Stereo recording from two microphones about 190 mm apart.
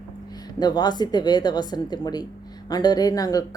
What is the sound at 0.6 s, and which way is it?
Speech, 20° left (ahead or behind).